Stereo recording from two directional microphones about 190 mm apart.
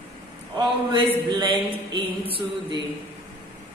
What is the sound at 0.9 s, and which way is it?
Speech, 25° right (ahead or behind).